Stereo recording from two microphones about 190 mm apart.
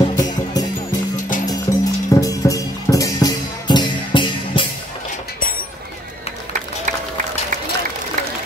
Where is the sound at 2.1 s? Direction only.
15° left (ahead or behind).